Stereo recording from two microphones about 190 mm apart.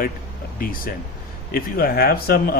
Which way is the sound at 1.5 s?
50° left (ahead or behind).